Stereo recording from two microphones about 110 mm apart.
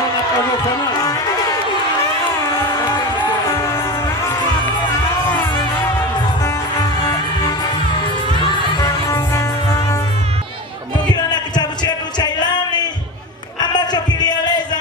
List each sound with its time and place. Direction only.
1.0 s run: 30° left (ahead or behind)
3.4 s music: 30° left (ahead or behind)
5.3 s music: 40° left (ahead or behind)
7.0 s music: 40° left (ahead or behind)
11.3 s music: 40° left (ahead or behind)
13.6 s a sound: 40° left (ahead or behind)